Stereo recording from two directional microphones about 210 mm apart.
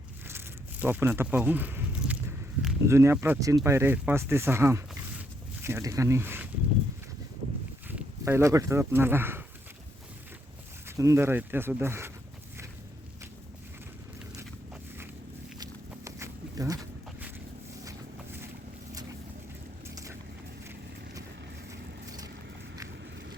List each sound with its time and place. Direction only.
0.3 s a sound: 10° right (ahead or behind)
2.8 s speech: 10° right (ahead or behind)
7.9 s speech: 10° right (ahead or behind)
10.8 s speech: 15° right (ahead or behind)
15.6 s a sound: 15° right (ahead or behind)
21.7 s vehicle: 15° right (ahead or behind)